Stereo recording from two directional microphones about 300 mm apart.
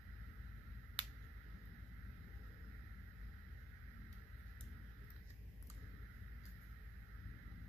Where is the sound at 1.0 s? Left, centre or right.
Centre.